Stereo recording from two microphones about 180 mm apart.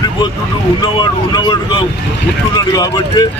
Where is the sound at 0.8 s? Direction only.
25° left (ahead or behind).